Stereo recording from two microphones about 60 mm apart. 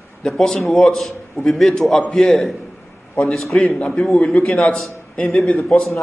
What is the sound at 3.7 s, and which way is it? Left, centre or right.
Speech, centre.